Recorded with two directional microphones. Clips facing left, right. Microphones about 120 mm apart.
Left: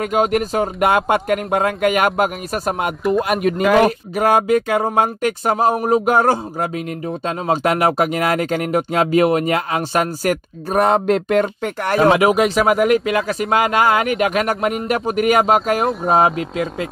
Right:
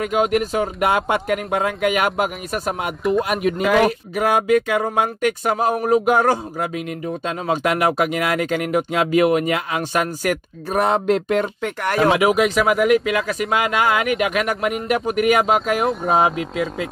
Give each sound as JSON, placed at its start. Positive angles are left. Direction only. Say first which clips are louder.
{"t": 0.0, "sound": "speech", "louder": "left 1 dB", "side_deg": 40}
{"t": 0.8, "sound": "speech", "louder": "left 4 dB", "side_deg": 55}
{"t": 11.8, "sound": "speech", "louder": "left 3 dB", "side_deg": 30}